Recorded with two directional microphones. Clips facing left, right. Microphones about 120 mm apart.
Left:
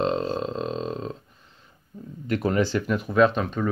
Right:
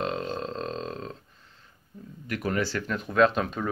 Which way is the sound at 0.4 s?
15° left (ahead or behind).